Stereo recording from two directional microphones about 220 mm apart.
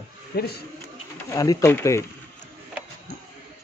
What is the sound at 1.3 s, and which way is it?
Speech, 15° left (ahead or behind).